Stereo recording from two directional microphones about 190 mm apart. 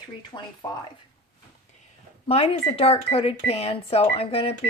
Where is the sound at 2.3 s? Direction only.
30° left (ahead or behind).